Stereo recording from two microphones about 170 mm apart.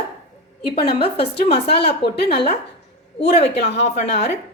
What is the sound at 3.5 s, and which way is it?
Speech, 85° left.